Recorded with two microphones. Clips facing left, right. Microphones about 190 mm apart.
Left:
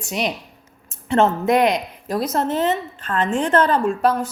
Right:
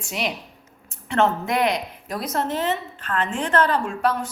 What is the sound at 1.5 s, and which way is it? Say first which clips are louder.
A woman's voice: left 5 dB; 20° left (ahead or behind).